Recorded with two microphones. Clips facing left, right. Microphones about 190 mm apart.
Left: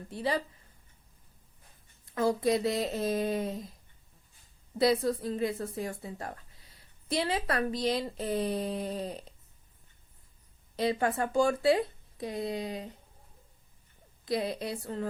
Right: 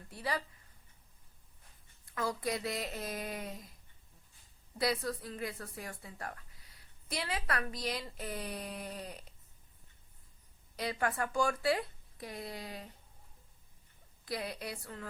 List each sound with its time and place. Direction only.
0.1 s speech: 25° left (ahead or behind)
2.1 s speech: 25° left (ahead or behind)
4.8 s speech: 25° left (ahead or behind)
10.8 s speech: 25° left (ahead or behind)
14.3 s speech: 25° left (ahead or behind)